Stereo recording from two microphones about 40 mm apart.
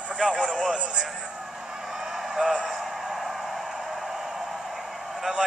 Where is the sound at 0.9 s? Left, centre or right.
Centre.